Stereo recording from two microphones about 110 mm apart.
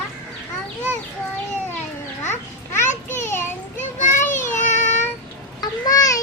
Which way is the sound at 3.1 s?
20° left (ahead or behind).